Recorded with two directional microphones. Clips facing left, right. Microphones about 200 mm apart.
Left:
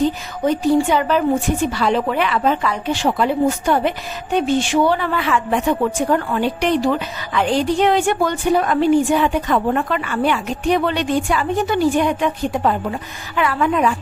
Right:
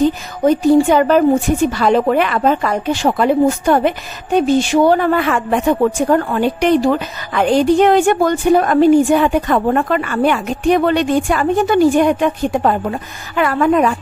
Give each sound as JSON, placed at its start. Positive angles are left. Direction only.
{"t": 0.5, "sound": "a woman's voice", "side_deg": -45}